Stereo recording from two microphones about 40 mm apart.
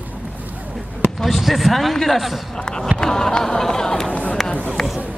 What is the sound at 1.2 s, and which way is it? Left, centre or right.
A man's voice, centre.